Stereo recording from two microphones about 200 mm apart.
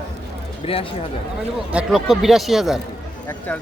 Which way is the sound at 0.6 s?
30° left (ahead or behind).